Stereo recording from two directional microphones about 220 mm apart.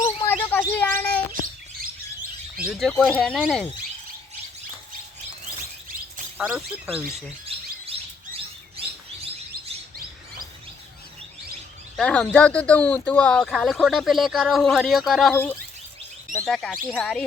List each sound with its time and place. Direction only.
0.0 s bird: 10° left (ahead or behind)
1.3 s chirp: 40° right (ahead or behind)
2.6 s speech: centre (ahead or behind)
6.3 s speech: 5° right (ahead or behind)
7.9 s bird: 25° right (ahead or behind)
11.9 s speech: 5° left (ahead or behind)